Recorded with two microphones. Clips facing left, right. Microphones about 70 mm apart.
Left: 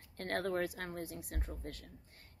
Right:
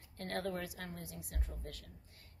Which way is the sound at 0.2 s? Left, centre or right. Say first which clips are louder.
Left 4 dB; left.